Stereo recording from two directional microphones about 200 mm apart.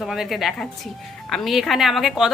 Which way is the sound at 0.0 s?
Centre (ahead or behind).